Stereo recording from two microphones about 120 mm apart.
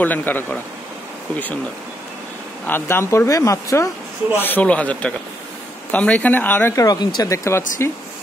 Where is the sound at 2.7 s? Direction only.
20° left (ahead or behind).